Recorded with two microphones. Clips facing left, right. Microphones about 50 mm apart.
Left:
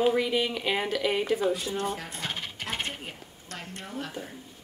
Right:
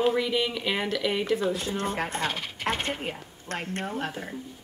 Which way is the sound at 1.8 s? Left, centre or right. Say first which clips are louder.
Right 4 dB; right.